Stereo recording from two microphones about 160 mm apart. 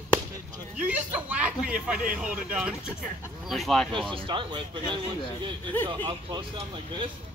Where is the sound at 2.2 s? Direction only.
10° right (ahead or behind).